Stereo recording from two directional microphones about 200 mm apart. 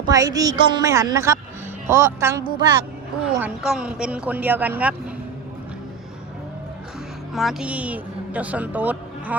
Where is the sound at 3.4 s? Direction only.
5° right (ahead or behind).